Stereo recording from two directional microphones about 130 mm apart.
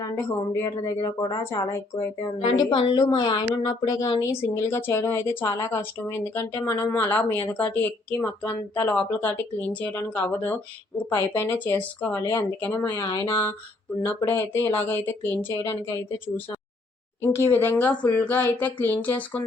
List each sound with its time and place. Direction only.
0.2 s speech: 20° left (ahead or behind)
2.7 s a woman's voice: 35° left (ahead or behind); by 15.8 s 20° left (ahead or behind)
17.2 s a woman's voice: 20° left (ahead or behind)